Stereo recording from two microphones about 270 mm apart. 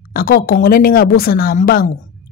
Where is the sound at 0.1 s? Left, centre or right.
Left.